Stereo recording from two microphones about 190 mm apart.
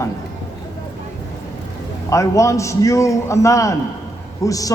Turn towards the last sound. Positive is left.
turn(degrees=20)  # may be behind; listen again after turning